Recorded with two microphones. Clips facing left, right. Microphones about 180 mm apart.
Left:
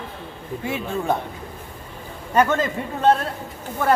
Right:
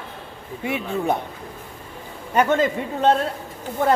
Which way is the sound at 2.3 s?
20° right (ahead or behind).